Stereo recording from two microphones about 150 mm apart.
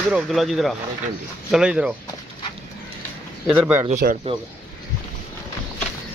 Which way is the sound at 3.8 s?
60° right (ahead or behind).